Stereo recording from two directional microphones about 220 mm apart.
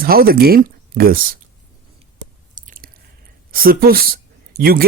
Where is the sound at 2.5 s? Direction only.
40° right (ahead or behind).